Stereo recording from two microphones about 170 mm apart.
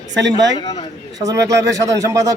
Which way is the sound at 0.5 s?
25° left (ahead or behind).